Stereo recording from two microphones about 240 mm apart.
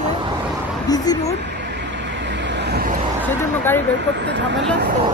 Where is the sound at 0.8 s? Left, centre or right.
Centre.